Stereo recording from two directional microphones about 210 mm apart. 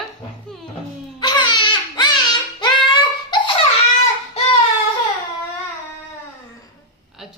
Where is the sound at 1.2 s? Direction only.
20° left (ahead or behind).